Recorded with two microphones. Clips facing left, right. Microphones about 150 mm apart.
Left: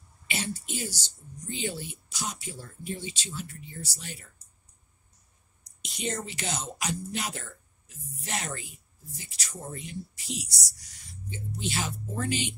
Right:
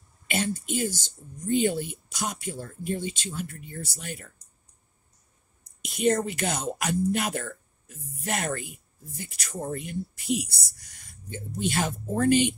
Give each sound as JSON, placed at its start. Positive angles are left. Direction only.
{"t": 0.3, "sound": "speech", "side_deg": -50}
{"t": 5.6, "sound": "speech", "side_deg": -55}